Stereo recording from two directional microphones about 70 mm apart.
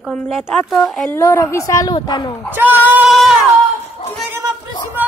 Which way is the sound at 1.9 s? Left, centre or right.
Left.